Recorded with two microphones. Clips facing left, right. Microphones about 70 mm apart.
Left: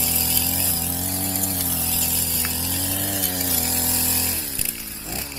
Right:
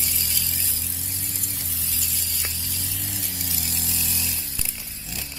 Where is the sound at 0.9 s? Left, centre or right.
Left.